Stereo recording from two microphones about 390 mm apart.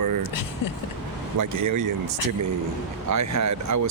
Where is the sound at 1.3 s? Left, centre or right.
Right.